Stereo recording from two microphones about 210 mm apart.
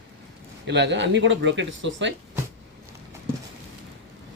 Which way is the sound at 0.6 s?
55° right (ahead or behind).